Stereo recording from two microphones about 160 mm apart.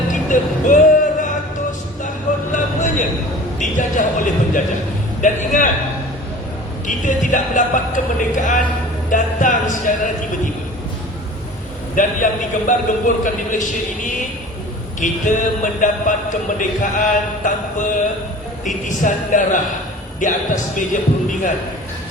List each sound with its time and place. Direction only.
0.1 s music: 55° left (ahead or behind)
2.5 s a sound: 55° left (ahead or behind)
5.2 s a man's voice: 50° left (ahead or behind)
6.8 s a man's voice: 55° left (ahead or behind)
11.9 s a man's voice: 55° left (ahead or behind)